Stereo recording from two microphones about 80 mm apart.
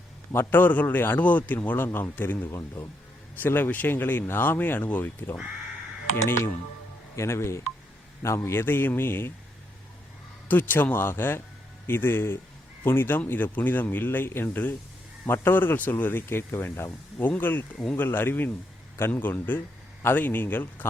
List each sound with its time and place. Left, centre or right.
0.3 s a man's voice: left
2.5 s speech: left
3.4 s a man's voice: left
6.1 s a man's voice: left
10.5 s a man's voice: left